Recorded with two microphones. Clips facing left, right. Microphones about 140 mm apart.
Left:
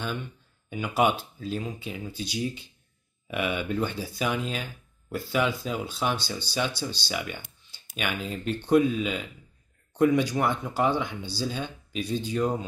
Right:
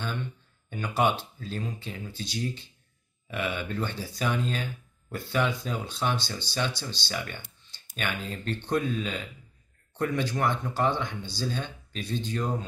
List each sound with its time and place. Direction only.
0.7 s speech: 10° left (ahead or behind)